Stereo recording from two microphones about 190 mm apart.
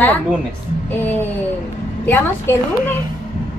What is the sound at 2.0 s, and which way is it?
Speech, 10° left (ahead or behind).